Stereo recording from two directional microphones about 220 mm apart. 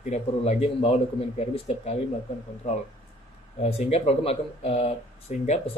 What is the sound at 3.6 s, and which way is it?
Speech, 30° left (ahead or behind).